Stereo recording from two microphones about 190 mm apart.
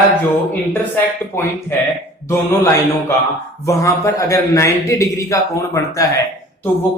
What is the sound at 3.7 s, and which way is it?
A man's voice, 15° left (ahead or behind).